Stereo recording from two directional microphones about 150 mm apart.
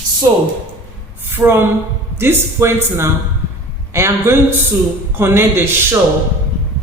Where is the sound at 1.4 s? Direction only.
10° right (ahead or behind).